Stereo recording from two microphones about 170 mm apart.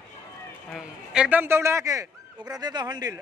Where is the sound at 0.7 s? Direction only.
5° right (ahead or behind).